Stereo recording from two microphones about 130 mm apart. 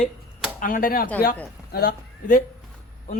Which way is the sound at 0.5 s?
90° left.